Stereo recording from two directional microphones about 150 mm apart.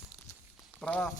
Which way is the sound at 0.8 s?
5° left (ahead or behind).